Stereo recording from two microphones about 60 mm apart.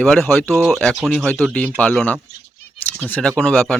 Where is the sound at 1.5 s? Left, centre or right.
Left.